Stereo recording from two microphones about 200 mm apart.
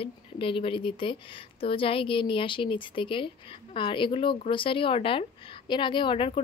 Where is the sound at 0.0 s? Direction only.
25° left (ahead or behind).